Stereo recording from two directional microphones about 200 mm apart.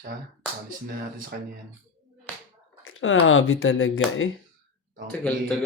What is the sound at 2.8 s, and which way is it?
Speech, 80° left.